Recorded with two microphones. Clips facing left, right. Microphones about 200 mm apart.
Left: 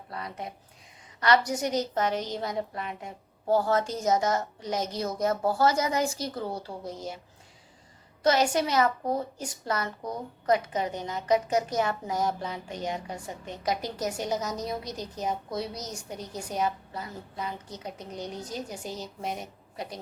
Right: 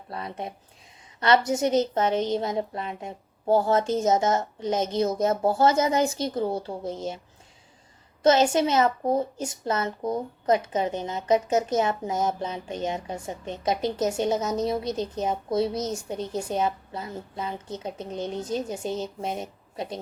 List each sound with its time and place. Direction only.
0.1 s a woman's voice: 25° right (ahead or behind)
8.2 s a woman's voice: 25° right (ahead or behind)